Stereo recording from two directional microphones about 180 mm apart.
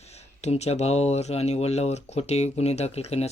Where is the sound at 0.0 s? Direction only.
35° left (ahead or behind).